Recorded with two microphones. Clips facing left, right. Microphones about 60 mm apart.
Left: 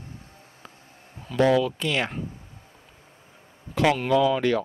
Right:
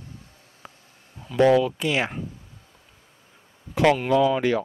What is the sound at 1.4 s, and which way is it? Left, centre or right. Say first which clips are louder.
Speech: right 3 dB; centre.